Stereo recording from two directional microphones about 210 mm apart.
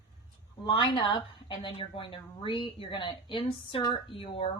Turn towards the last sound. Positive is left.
turn(degrees=25)  # may be behind; listen again after turning